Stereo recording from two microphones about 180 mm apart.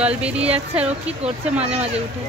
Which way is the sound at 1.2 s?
35° right (ahead or behind).